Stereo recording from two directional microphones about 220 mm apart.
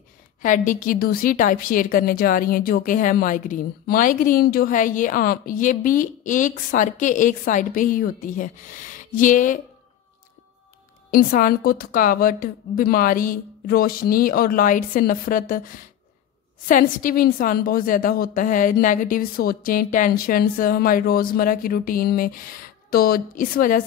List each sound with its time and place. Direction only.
0.4 s a woman's voice: 35° left (ahead or behind)
11.1 s a woman's voice: 40° left (ahead or behind)
16.6 s a woman's voice: 40° left (ahead or behind)